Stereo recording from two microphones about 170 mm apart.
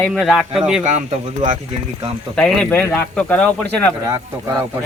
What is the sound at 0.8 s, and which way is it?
Speech, 45° right (ahead or behind).